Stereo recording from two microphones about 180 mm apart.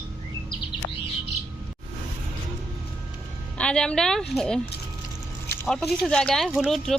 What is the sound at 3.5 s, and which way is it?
Speech, 5° left (ahead or behind).